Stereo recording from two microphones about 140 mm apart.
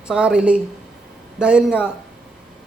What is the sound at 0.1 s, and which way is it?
A woman's voice, 5° right (ahead or behind).